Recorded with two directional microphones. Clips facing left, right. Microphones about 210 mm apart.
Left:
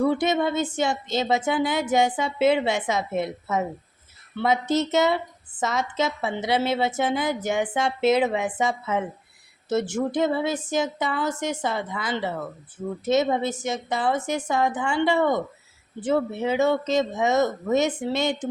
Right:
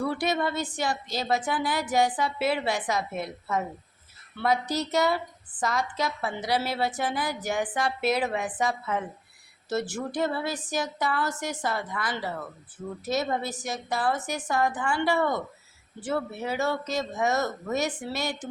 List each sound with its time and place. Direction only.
0.0 s speech: 20° left (ahead or behind)